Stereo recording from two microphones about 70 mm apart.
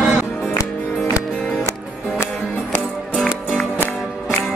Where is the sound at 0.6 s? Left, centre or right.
Left.